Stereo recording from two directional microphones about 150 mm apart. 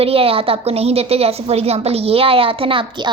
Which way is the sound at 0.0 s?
40° right (ahead or behind).